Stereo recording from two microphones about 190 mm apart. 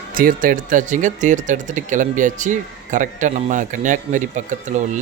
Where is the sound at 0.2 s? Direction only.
45° right (ahead or behind).